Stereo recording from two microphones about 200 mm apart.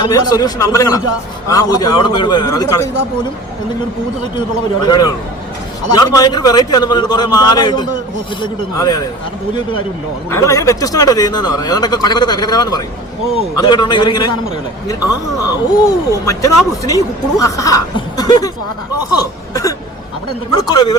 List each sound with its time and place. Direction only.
0.0 s speech: 20° left (ahead or behind)
4.4 s speech: 20° left (ahead or behind)
10.2 s speech: 15° left (ahead or behind)